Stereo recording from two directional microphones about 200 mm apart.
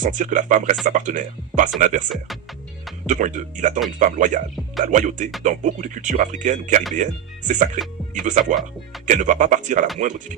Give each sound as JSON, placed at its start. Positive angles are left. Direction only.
{"t": 0.0, "sound": "speech", "side_deg": -40}
{"t": 2.0, "sound": "speech", "side_deg": 0}
{"t": 3.1, "sound": "speech", "side_deg": -40}